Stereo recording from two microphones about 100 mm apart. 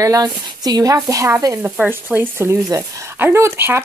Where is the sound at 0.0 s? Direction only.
40° right (ahead or behind).